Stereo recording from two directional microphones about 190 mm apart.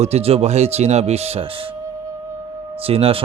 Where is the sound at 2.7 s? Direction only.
30° right (ahead or behind).